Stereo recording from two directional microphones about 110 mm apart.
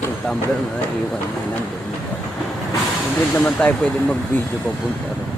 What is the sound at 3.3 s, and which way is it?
Speech, 15° left (ahead or behind).